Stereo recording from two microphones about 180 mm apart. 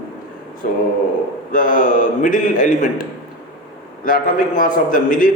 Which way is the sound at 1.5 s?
50° left (ahead or behind).